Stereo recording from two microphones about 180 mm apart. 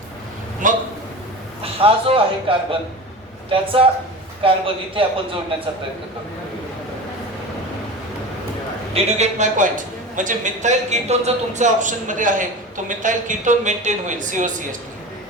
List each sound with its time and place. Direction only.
0.6 s a man's voice: 45° right (ahead or behind)
1.6 s a man's voice: 30° right (ahead or behind)
8.9 s a man's voice: 40° right (ahead or behind)